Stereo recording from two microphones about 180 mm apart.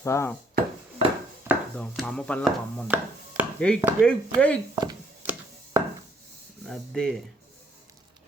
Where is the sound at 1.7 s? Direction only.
5° left (ahead or behind).